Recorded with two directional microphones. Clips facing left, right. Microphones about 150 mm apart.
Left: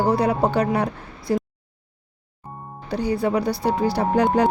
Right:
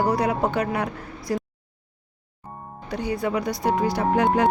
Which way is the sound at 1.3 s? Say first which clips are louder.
Left 4 dB; 25° left (ahead or behind).